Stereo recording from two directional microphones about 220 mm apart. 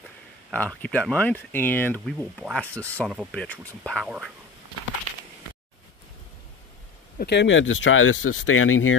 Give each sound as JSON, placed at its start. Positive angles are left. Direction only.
{"t": 0.5, "sound": "speech", "side_deg": 5}
{"t": 7.2, "sound": "speech", "side_deg": 50}